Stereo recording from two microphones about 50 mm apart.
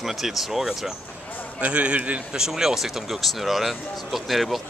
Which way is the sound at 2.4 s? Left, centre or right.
Centre.